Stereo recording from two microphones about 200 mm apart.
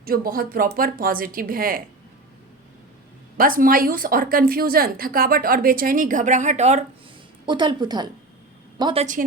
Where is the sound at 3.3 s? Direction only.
45° right (ahead or behind).